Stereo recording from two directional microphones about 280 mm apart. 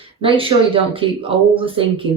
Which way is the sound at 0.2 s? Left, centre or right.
Centre.